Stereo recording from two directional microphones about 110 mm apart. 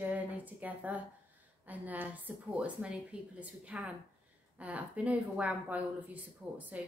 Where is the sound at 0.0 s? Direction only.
15° right (ahead or behind).